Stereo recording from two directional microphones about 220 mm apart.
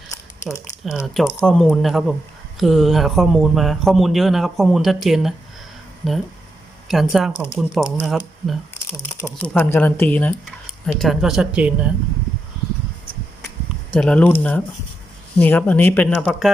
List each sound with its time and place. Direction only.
0.1 s crumpling: 15° left (ahead or behind)
0.9 s speech: centre (ahead or behind)
13.9 s speech: 5° left (ahead or behind)